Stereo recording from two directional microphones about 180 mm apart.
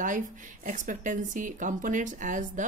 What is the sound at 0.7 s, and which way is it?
A woman's voice, 45° right (ahead or behind).